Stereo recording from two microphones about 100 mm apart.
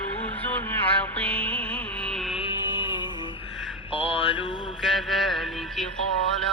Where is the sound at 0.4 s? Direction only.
15° left (ahead or behind).